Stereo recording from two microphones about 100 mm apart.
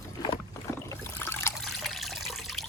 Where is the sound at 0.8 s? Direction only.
25° left (ahead or behind).